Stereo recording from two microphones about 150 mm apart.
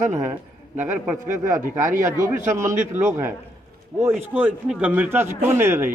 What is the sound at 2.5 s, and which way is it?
Speech, 20° right (ahead or behind).